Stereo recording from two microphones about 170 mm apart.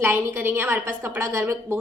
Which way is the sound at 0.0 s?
10° right (ahead or behind).